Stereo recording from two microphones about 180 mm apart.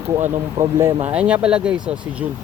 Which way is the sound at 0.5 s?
20° right (ahead or behind).